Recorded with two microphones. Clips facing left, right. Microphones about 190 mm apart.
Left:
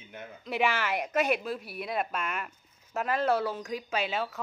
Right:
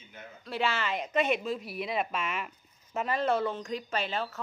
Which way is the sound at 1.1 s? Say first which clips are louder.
Right 1 dB; 5° left (ahead or behind).